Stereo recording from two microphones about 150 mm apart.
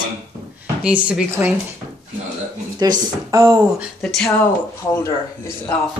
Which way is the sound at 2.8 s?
25° right (ahead or behind).